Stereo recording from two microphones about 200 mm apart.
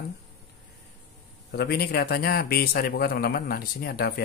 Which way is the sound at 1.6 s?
55° left (ahead or behind).